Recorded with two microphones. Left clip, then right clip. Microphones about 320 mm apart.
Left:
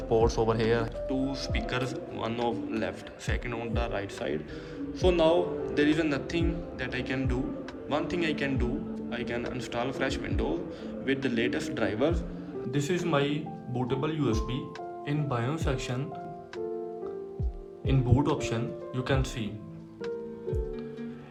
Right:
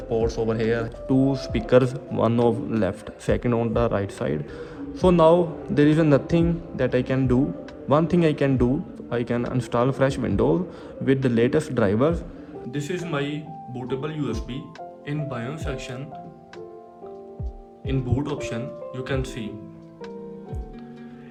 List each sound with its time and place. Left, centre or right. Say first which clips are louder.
0.1 s a man's voice: right 1 dB; centre
12.7 s speech: even; centre
17.8 s speech: even; centre